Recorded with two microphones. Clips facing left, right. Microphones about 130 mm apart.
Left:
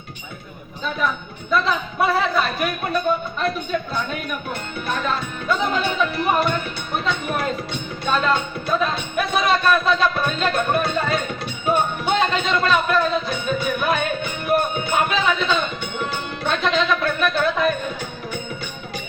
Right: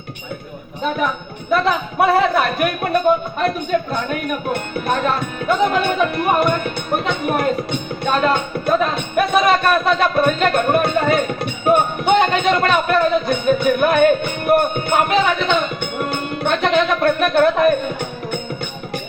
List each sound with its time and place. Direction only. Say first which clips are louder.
0.8 s speech: right 4 dB; 55° right (ahead or behind)